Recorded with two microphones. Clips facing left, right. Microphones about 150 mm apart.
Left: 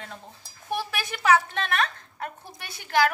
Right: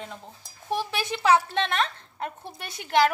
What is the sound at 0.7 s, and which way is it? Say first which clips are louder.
A woman's voice: right 2 dB; 20° right (ahead or behind).